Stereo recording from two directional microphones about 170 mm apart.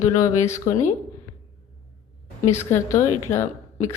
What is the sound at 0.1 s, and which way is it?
Speech, 20° left (ahead or behind).